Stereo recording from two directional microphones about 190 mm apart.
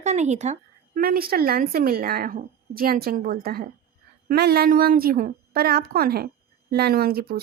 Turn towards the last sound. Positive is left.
turn(degrees=-55)  # may be behind; listen again after turning